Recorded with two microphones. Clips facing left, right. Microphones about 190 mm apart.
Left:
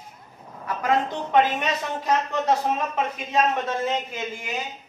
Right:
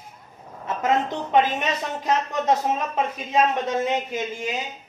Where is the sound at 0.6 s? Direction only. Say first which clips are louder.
Right 1 dB; 20° right (ahead or behind).